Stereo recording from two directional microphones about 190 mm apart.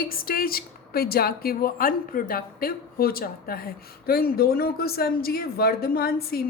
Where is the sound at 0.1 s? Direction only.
50° left (ahead or behind).